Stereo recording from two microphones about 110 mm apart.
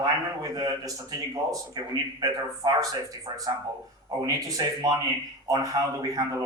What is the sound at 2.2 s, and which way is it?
Speech, 30° right (ahead or behind).